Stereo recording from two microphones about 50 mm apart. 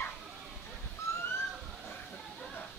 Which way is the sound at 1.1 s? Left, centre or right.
Left.